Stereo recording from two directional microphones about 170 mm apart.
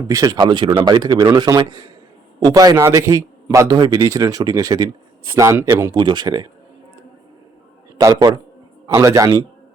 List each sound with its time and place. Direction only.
0.1 s a man's voice: 20° right (ahead or behind)
5.9 s a man's voice: 25° right (ahead or behind)
7.9 s a man's voice: 25° right (ahead or behind)